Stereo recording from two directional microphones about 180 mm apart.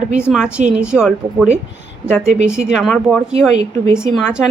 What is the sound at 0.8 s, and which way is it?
A woman's voice, 5° right (ahead or behind).